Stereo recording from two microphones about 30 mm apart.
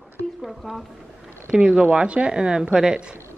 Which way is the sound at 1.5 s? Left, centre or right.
Right.